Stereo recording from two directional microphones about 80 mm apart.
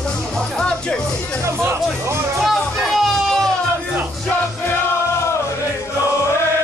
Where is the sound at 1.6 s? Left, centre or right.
Right.